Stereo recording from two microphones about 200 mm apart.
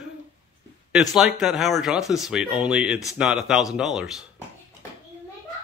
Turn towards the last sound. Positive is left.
turn(degrees=0)  # may be behind; listen again after turning